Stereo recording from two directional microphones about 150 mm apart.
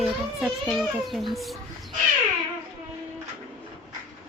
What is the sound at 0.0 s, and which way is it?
A child's voice, centre (ahead or behind).